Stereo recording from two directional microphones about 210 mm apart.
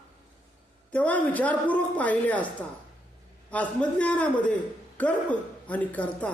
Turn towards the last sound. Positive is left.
turn(degrees=5)  # may be behind; listen again after turning